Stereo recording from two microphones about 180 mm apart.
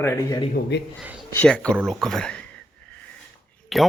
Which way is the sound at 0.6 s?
70° left (ahead or behind).